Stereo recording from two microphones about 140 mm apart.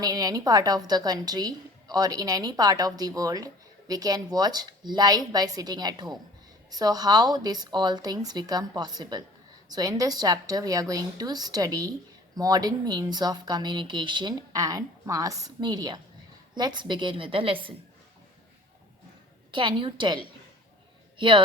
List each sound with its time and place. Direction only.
0.0 s a woman's voice: 25° right (ahead or behind)
19.5 s a woman's voice: 35° right (ahead or behind)